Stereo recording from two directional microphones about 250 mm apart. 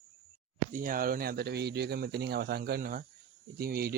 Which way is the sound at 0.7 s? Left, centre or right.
Right.